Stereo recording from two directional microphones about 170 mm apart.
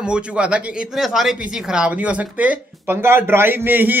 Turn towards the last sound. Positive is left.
turn(degrees=-10)  # may be behind; listen again after turning